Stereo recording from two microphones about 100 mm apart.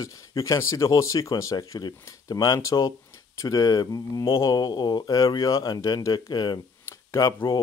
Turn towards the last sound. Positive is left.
turn(degrees=30)  # may be behind; listen again after turning